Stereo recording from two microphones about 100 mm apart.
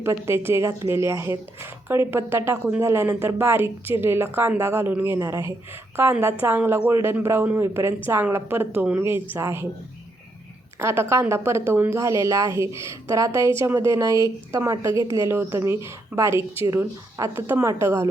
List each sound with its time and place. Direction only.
0.3 s a woman's voice: 25° right (ahead or behind)
10.8 s a woman's voice: 25° right (ahead or behind)